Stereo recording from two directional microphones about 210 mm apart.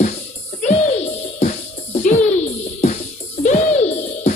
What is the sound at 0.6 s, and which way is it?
Music, 30° left (ahead or behind).